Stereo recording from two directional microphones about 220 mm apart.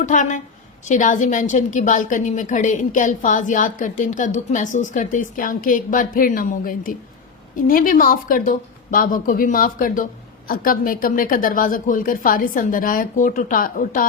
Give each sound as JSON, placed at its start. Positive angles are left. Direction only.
{"t": 0.0, "sound": "a woman's voice", "side_deg": 35}